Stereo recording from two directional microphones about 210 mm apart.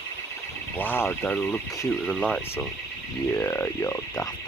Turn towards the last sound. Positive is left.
turn(degrees=15)  # may be behind; listen again after turning